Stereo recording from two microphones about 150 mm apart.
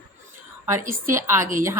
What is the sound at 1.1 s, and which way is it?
Speech, 20° right (ahead or behind).